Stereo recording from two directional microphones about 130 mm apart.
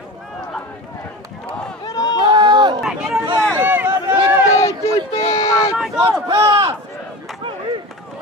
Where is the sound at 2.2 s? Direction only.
35° right (ahead or behind).